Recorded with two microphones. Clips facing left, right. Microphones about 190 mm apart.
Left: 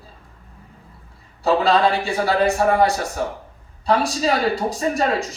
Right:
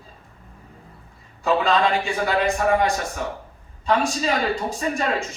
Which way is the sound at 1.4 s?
35° left (ahead or behind).